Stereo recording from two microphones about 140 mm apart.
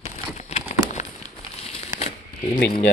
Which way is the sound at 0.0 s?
50° left (ahead or behind).